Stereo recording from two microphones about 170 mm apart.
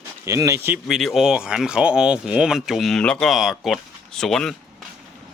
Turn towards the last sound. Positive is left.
turn(degrees=0)  # may be behind; listen again after turning